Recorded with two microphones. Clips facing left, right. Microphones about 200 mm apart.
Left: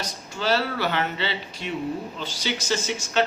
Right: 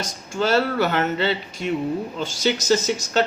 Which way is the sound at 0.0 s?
45° right (ahead or behind).